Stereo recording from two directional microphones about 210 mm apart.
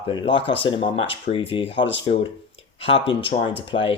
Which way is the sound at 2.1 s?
40° left (ahead or behind).